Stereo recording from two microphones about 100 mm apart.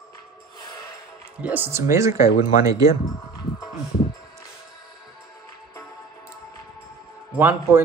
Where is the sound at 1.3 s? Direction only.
15° right (ahead or behind).